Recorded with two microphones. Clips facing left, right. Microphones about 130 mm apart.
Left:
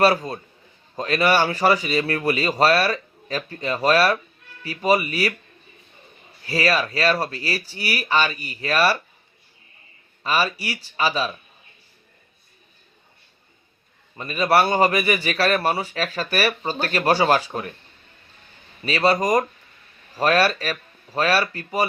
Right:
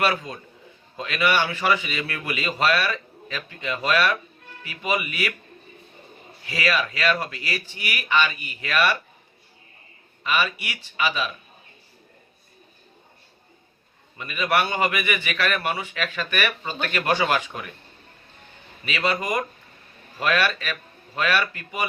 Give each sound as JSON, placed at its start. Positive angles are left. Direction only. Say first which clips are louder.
{"t": 0.0, "sound": "a man's voice", "louder": "left 6 dB", "side_deg": 35}
{"t": 6.4, "sound": "a man's voice", "louder": "left 3 dB", "side_deg": 35}
{"t": 10.2, "sound": "a man's voice", "louder": "left 2 dB", "side_deg": 35}
{"t": 14.2, "sound": "a man's voice", "louder": "left 5 dB", "side_deg": 35}
{"t": 18.9, "sound": "a man's voice", "louder": "left 6 dB", "side_deg": 35}